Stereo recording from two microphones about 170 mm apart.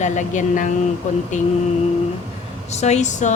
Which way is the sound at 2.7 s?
40° left (ahead or behind).